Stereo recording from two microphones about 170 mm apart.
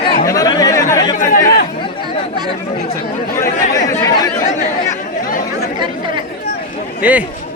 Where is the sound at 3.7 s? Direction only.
20° left (ahead or behind).